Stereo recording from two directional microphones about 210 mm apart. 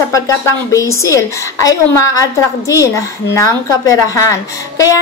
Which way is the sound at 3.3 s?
15° left (ahead or behind).